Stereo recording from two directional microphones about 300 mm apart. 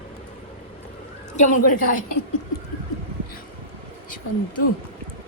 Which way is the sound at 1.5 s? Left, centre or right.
Left.